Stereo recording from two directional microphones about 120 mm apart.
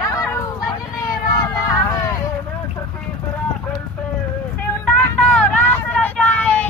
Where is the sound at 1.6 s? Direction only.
30° left (ahead or behind).